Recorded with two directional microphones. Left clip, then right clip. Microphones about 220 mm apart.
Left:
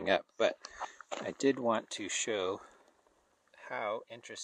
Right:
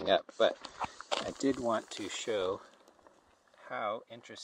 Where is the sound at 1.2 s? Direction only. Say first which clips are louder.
Left 4 dB; 15° left (ahead or behind).